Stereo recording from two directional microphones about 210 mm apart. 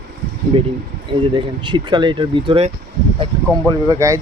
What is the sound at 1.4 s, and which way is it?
Speech, 20° right (ahead or behind).